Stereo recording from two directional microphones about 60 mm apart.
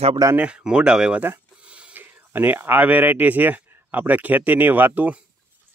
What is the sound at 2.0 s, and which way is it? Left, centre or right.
Speech, right.